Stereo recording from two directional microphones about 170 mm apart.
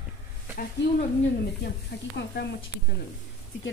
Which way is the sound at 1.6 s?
75° left (ahead or behind).